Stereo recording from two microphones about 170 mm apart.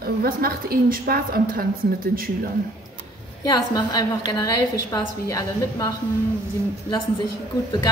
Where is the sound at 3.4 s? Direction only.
25° left (ahead or behind).